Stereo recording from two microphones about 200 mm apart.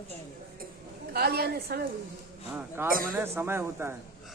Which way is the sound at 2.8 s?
45° right (ahead or behind).